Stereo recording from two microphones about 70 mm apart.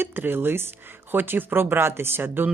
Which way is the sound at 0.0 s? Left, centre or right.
Right.